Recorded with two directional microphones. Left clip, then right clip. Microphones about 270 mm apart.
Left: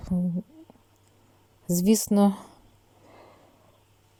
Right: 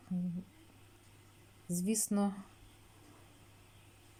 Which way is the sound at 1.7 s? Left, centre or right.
Left.